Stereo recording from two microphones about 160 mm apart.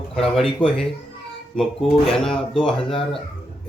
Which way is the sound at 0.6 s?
35° left (ahead or behind).